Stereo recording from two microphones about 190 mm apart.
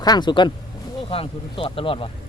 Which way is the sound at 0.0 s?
20° left (ahead or behind).